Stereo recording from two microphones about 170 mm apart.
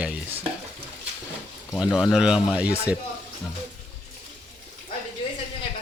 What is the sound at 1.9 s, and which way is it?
Speech, centre (ahead or behind).